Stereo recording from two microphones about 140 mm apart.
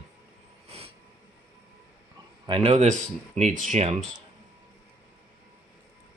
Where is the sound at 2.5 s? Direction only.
50° right (ahead or behind).